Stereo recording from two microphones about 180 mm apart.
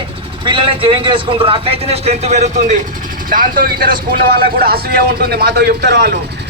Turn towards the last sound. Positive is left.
turn(degrees=-70)  # may be behind; listen again after turning